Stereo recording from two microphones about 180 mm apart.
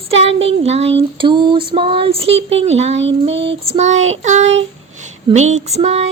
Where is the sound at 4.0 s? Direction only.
90° right.